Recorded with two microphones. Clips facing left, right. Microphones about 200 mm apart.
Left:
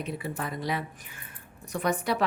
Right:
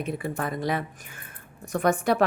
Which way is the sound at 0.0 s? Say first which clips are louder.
Right 4 dB; 50° right (ahead or behind).